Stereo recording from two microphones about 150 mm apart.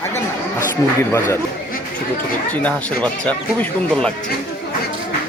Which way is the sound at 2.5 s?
10° left (ahead or behind).